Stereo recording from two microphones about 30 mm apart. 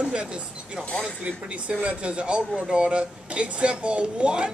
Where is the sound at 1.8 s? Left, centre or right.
Right.